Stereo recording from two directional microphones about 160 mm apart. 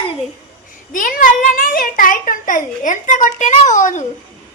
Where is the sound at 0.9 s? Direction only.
60° left (ahead or behind).